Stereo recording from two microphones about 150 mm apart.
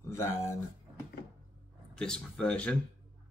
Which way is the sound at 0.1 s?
20° left (ahead or behind).